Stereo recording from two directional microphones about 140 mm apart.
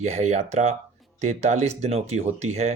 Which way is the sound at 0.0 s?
55° right (ahead or behind).